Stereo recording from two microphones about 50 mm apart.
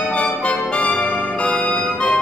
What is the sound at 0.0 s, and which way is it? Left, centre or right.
Music, left.